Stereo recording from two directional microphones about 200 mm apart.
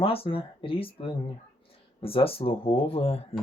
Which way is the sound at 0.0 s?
30° left (ahead or behind).